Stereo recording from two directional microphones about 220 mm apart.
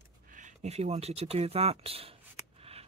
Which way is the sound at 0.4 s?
30° right (ahead or behind).